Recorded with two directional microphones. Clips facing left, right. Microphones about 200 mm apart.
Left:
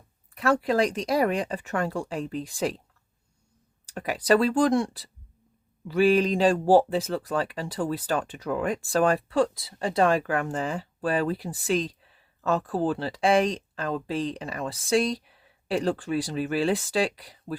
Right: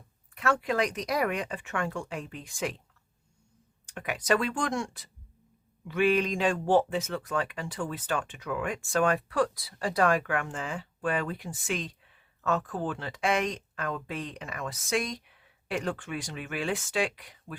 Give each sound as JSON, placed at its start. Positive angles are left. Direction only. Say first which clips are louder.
{"t": 0.3, "sound": "speech", "louder": "left 5 dB", "side_deg": 35}
{"t": 3.8, "sound": "speech", "louder": "left 5 dB", "side_deg": 35}